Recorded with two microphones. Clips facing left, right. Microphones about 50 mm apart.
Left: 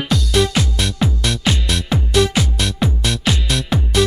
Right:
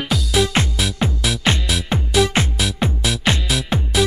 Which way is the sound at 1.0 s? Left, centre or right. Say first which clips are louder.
Left 2 dB; right.